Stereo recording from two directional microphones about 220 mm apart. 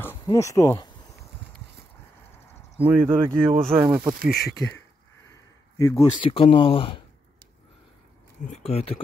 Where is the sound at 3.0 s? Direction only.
20° right (ahead or behind).